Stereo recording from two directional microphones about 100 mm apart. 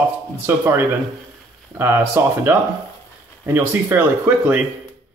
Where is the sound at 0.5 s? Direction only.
25° right (ahead or behind).